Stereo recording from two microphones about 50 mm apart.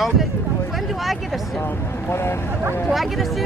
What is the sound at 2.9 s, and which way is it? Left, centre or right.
Speech, centre.